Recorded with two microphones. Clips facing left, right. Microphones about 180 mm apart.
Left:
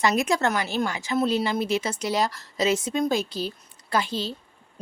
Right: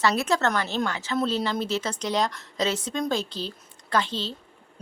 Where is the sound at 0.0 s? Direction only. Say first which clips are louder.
Left 1 dB; 15° left (ahead or behind).